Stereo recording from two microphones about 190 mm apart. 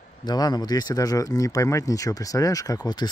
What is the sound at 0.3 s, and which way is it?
Speech, 20° left (ahead or behind).